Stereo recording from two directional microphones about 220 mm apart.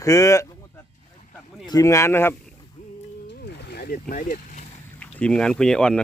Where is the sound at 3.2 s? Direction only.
50° left (ahead or behind); by 4.7 s 35° left (ahead or behind).